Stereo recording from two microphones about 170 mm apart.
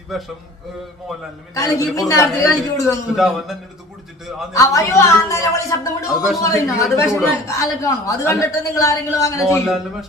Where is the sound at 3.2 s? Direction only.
Centre (ahead or behind).